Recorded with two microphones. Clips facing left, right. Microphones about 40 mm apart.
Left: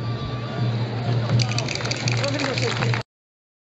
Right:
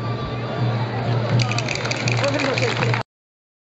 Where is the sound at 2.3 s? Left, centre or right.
Right.